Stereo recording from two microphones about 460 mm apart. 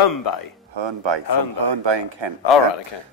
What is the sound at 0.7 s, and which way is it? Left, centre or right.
Speech, right.